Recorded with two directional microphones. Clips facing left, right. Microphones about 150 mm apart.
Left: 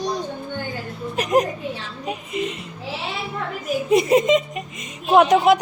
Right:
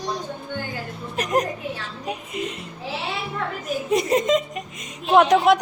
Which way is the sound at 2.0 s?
5° left (ahead or behind).